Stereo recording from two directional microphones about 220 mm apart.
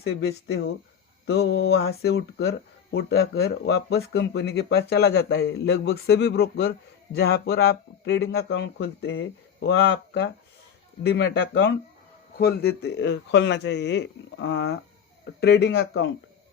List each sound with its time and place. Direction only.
0.2 s speech: 50° left (ahead or behind)